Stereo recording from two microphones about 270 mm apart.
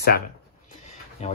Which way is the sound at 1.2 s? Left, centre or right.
Left.